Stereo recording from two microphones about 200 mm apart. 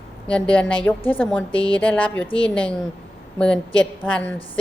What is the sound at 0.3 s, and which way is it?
A woman's voice, 5° left (ahead or behind).